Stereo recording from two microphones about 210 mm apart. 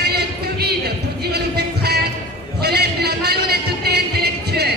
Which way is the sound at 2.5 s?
50° right (ahead or behind).